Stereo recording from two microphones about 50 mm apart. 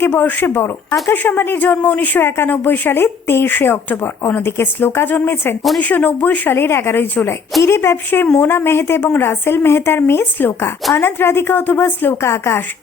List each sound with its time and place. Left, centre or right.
0.2 s a woman's voice: left
1.0 s a woman's voice: left
2.2 s a woman's voice: left
6.5 s a woman's voice: left
7.6 s a woman's voice: left
11.6 s speech: left
12.2 s speech: left